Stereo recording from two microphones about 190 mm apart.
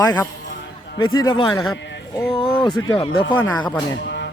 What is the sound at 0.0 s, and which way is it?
Speech, 20° left (ahead or behind).